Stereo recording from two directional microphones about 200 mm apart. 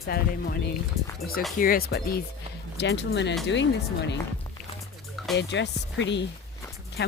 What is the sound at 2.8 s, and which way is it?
Speech, 60° left (ahead or behind).